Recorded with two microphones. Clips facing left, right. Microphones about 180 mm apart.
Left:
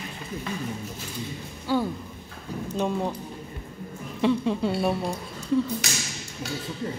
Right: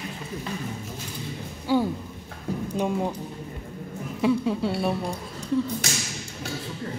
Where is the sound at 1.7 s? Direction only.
15° right (ahead or behind).